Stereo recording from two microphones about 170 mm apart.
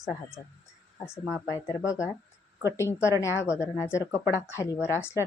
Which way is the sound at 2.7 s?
15° left (ahead or behind).